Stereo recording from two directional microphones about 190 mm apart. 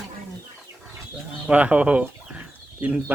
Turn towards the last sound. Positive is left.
turn(degrees=-10)  # may be behind; listen again after turning